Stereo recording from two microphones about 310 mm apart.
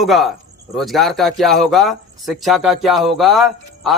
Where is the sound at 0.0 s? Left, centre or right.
Centre.